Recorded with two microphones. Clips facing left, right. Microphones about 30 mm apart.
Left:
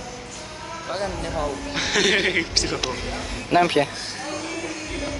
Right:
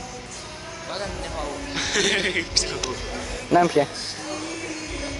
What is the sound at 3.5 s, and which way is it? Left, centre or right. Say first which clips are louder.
Speech: even; left.